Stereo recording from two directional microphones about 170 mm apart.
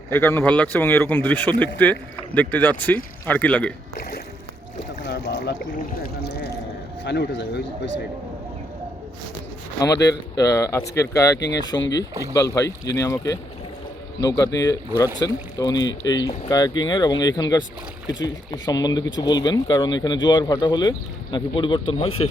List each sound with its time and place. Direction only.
0.1 s speech: 15° left (ahead or behind)
4.8 s boat: 85° left
6.0 s a sound: 75° left (ahead or behind)
7.0 s speech: 85° left
9.8 s speech: 20° left (ahead or behind)
11.3 s speech: 90° left
12.3 s speech: 20° left (ahead or behind); by 22.3 s 35° left (ahead or behind)